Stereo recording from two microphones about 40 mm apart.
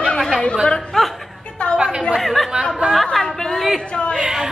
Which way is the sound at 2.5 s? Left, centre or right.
Right.